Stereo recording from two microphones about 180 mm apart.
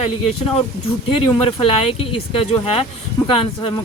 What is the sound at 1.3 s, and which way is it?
Speech, 30° left (ahead or behind).